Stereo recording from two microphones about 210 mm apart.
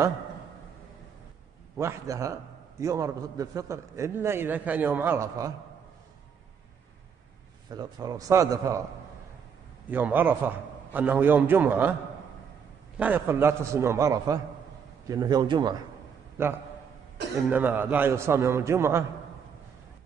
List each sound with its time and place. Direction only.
1.8 s a man's voice: 15° right (ahead or behind)
7.7 s a man's voice: 20° right (ahead or behind)
9.8 s a man's voice: 10° right (ahead or behind)
12.9 s a man's voice: 10° right (ahead or behind)